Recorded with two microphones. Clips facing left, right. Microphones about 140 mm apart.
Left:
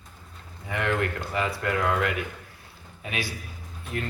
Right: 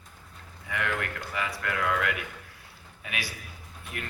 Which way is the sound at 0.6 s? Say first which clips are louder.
Left 5 dB; 30° left (ahead or behind).